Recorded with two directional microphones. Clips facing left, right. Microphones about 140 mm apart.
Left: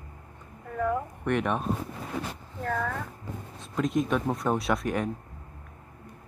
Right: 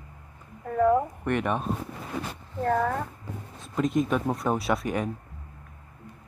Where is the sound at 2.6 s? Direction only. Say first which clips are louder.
Right 6 dB; 35° right (ahead or behind).